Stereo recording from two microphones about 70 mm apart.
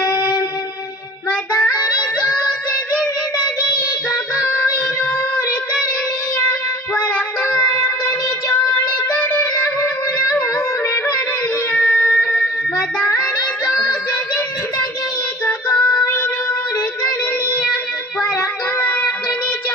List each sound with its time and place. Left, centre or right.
1.3 s child singing: centre
7.0 s child singing: left
7.5 s a sound: centre
11.7 s child singing: centre
15.7 s music: centre